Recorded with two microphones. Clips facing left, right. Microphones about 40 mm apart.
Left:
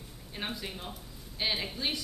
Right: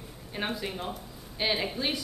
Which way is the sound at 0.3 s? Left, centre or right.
Centre.